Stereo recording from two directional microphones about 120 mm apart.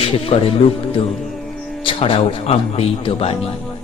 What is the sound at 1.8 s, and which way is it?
Speech, 50° left (ahead or behind).